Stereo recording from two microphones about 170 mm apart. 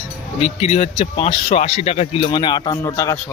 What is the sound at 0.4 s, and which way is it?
Speech, 35° left (ahead or behind).